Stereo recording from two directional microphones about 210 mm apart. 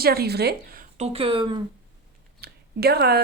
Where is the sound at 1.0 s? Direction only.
25° right (ahead or behind).